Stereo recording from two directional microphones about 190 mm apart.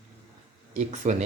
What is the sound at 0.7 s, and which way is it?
Speech, 40° right (ahead or behind).